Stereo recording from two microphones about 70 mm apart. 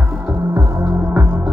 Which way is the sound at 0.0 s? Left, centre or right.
Centre.